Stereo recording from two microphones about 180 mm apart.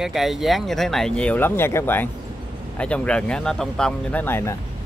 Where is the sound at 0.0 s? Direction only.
Centre (ahead or behind).